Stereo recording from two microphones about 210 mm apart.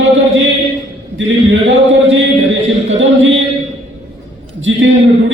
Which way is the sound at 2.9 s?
65° right (ahead or behind).